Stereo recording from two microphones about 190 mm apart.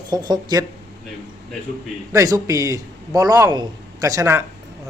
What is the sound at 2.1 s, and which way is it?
A man's voice, 15° right (ahead or behind).